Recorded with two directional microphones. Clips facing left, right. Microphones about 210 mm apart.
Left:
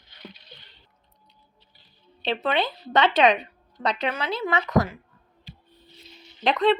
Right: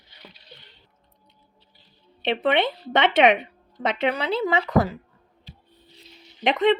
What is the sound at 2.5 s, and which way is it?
A woman's voice, 25° right (ahead or behind).